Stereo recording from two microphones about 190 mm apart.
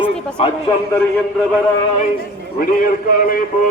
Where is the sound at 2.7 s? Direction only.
50° left (ahead or behind).